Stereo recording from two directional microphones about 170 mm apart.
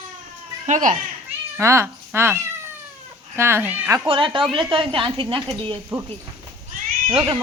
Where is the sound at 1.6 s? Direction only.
15° right (ahead or behind).